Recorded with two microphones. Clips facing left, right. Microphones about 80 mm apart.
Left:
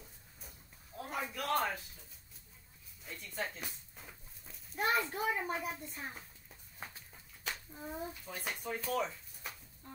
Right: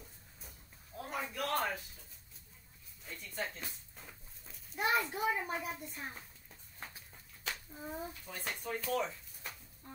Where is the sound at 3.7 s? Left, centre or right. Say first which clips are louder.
Even; centre.